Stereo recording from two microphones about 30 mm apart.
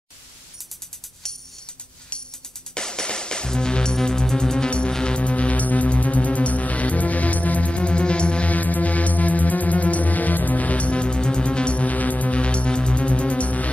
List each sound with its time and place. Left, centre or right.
1.2 s music: centre
2.7 s music: left
4.6 s music: left
5.2 s music: left
7.7 s music: left
8.5 s music: left
12.3 s music: left